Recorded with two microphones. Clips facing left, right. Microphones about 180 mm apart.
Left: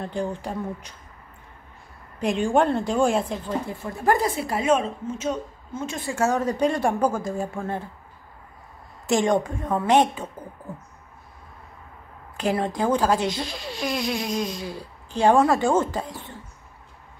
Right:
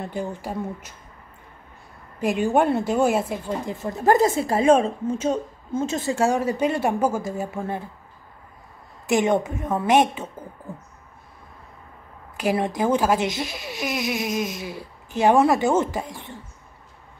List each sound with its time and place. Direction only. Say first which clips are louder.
0.0 s speech: left 1 dB; 10° right (ahead or behind)
2.1 s a woman's voice: right 1 dB; 5° right (ahead or behind); by 5.9 s 30° right (ahead or behind)
6.0 s speech: even; 15° right (ahead or behind)
9.0 s a woman's voice: right 1 dB; 20° right (ahead or behind)
12.4 s speech: right 1 dB; 15° right (ahead or behind)
13.2 s speech: right 1 dB; 20° right (ahead or behind)
15.2 s speech: right 1 dB; 10° right (ahead or behind)